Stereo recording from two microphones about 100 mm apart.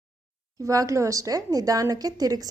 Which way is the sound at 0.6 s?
35° right (ahead or behind).